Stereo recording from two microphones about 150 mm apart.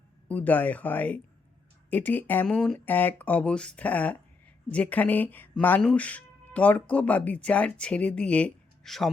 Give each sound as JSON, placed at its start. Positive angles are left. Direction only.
{"t": 0.3, "sound": "speech", "side_deg": 10}